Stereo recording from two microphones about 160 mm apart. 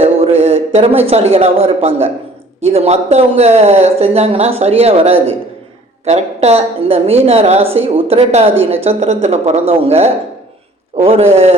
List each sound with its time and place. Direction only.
0.0 s a man's voice: 40° right (ahead or behind)